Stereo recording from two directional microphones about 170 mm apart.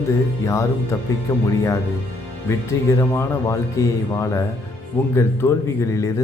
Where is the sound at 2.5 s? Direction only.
15° left (ahead or behind).